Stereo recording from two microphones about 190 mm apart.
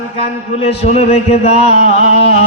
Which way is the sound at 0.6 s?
35° left (ahead or behind).